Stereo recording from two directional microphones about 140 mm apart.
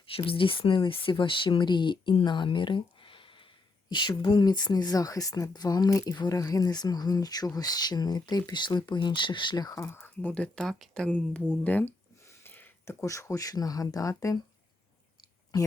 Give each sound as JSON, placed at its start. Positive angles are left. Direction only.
{"t": 0.0, "sound": "speech", "side_deg": 40}